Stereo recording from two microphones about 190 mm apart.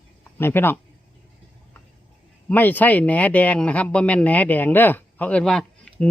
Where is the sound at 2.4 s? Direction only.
10° left (ahead or behind).